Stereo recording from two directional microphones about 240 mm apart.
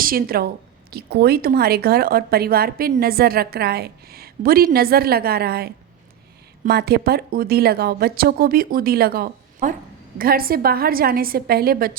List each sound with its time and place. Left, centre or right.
0.0 s a woman's voice: right